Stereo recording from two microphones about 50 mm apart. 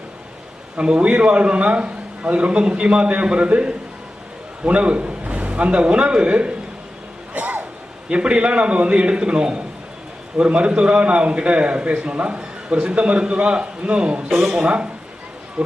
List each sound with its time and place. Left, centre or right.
0.8 s a man's voice: right
7.3 s a sound: right
8.1 s a man's voice: right